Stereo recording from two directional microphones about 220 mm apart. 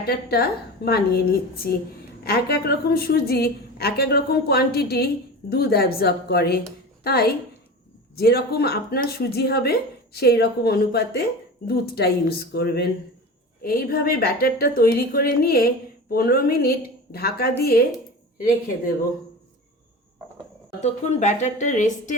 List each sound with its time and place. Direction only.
0.0 s a woman's voice: 45° left (ahead or behind)
20.8 s speech: 30° left (ahead or behind)